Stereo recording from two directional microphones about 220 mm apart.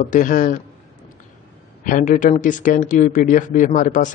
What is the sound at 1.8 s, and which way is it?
Speech, 35° left (ahead or behind).